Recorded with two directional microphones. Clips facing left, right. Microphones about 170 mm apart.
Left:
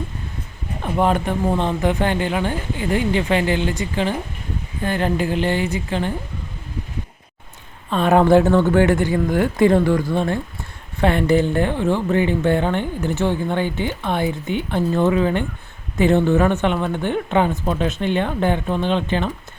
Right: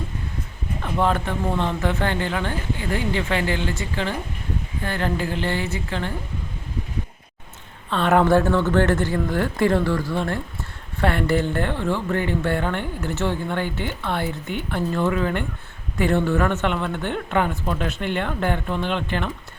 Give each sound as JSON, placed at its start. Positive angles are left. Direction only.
{"t": 0.8, "sound": "speech", "side_deg": 20}
{"t": 7.9, "sound": "speech", "side_deg": 15}